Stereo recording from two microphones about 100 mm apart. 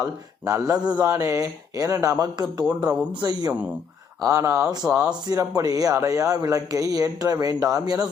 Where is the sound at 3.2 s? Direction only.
40° right (ahead or behind).